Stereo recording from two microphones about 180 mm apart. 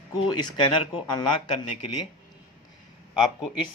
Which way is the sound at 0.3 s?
25° left (ahead or behind).